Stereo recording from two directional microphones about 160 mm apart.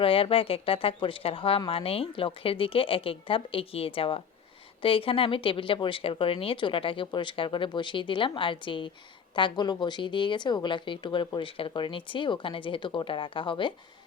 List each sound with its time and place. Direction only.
0.0 s a woman's voice: 35° left (ahead or behind)